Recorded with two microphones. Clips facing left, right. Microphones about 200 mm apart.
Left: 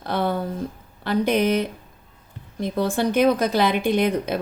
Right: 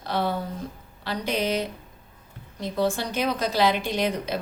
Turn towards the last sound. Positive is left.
turn(degrees=55)  # may be behind; listen again after turning